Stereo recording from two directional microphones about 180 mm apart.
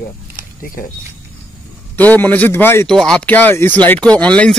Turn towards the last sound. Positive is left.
turn(degrees=5)  # may be behind; listen again after turning